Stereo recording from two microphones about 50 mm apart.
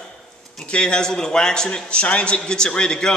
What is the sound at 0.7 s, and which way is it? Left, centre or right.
Speech, centre.